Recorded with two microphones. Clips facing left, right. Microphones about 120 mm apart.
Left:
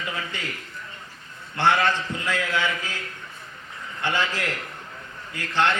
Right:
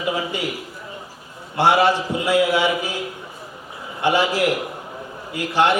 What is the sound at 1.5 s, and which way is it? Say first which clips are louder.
A man's voice: right 5 dB; 15° right (ahead or behind).